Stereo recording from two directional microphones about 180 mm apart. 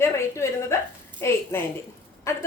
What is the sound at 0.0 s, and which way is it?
A woman's voice, 15° left (ahead or behind).